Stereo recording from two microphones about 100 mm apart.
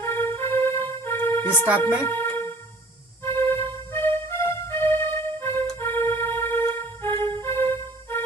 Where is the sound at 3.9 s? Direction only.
25° left (ahead or behind).